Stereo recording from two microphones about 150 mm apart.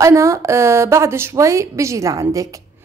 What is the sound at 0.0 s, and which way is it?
Speech, 20° right (ahead or behind).